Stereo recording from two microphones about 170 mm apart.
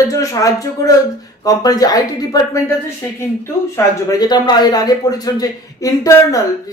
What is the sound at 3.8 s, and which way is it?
A man's voice, 20° left (ahead or behind).